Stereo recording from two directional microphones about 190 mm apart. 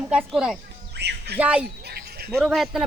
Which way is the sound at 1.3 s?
5° right (ahead or behind).